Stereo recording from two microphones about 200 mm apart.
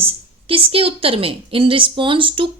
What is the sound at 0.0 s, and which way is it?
A woman's voice, 30° right (ahead or behind).